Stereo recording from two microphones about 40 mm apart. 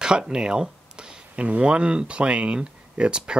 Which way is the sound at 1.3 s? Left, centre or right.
Right.